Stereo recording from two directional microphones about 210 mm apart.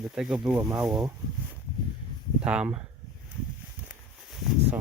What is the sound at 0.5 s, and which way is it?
Speech, 15° right (ahead or behind).